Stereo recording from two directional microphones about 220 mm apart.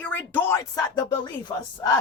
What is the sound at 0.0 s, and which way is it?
Speech, 10° left (ahead or behind).